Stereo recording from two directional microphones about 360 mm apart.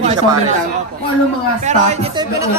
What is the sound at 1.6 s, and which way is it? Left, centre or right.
Speech, centre.